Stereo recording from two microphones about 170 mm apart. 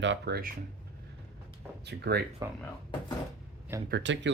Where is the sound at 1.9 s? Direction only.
75° right (ahead or behind).